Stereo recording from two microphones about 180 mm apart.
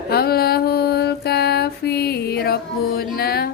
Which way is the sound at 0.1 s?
60° left (ahead or behind).